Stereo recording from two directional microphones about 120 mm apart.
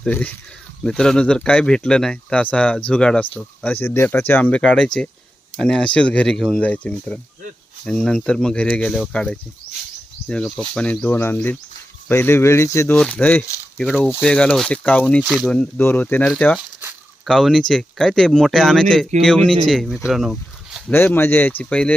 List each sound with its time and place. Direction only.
0.0 s speech: 10° left (ahead or behind)
12.9 s speech: 10° left (ahead or behind)
15.2 s speech: 5° right (ahead or behind)
15.4 s speech: 10° left (ahead or behind)
17.2 s speech: 5° left (ahead or behind)
20.1 s a sound: centre (ahead or behind)
20.9 s speech: 20° left (ahead or behind)